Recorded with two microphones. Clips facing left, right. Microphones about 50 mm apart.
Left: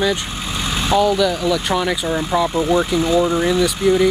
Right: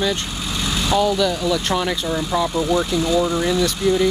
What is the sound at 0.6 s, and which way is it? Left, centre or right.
Vehicle, left.